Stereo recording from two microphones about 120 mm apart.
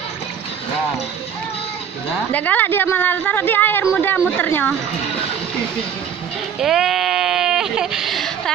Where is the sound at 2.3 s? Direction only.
15° left (ahead or behind).